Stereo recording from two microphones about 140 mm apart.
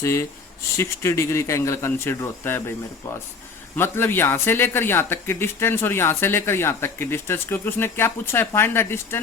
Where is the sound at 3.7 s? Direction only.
15° left (ahead or behind).